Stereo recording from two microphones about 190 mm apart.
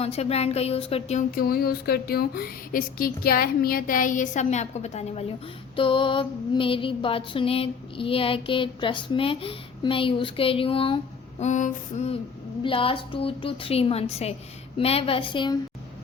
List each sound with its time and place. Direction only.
0.0 s speech: 35° left (ahead or behind)
1.4 s speech: 50° left (ahead or behind); by 5.2 s 35° left (ahead or behind)
5.7 s a sound: 25° left (ahead or behind)